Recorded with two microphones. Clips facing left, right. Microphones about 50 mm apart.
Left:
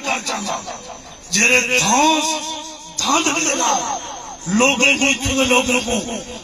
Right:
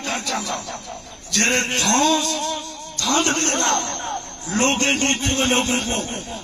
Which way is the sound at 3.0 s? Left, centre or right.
Left.